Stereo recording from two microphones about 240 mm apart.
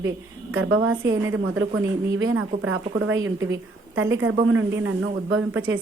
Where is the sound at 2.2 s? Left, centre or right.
Right.